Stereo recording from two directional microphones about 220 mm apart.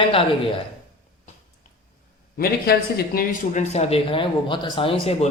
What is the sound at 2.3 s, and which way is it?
Speech, 45° left (ahead or behind).